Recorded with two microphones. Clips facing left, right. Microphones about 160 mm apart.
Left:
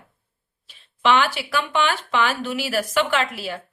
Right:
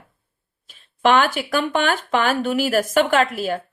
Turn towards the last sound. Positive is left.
turn(degrees=-50)  # may be behind; listen again after turning